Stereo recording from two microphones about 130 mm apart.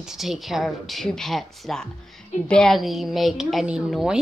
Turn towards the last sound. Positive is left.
turn(degrees=-5)  # may be behind; listen again after turning